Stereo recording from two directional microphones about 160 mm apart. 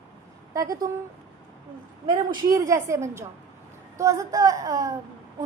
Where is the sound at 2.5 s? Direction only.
20° right (ahead or behind).